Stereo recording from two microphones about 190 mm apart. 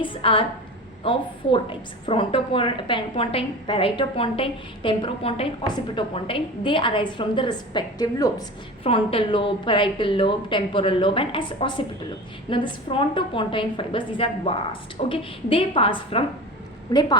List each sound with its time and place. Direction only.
0.0 s a woman's voice: 30° left (ahead or behind)
8.8 s a woman's voice: 30° left (ahead or behind)